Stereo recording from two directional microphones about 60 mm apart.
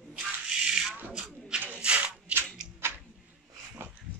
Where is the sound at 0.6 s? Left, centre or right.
Centre.